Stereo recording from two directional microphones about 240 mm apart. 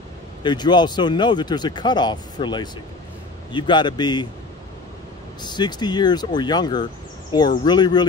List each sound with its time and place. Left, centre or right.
0.4 s speech: centre
5.4 s speech: centre